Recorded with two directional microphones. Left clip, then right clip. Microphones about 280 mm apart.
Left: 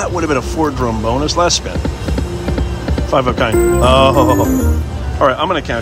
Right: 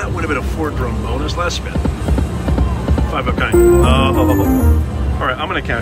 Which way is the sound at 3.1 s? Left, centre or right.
Centre.